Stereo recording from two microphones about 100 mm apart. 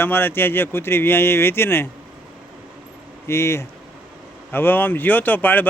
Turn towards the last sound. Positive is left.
turn(degrees=15)  # may be behind; listen again after turning